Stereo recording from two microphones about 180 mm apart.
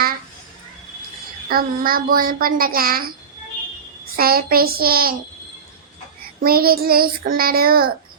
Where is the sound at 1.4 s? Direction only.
55° right (ahead or behind).